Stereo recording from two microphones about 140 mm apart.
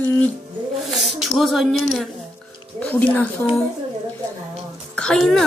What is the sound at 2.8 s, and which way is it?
Speech, 10° left (ahead or behind).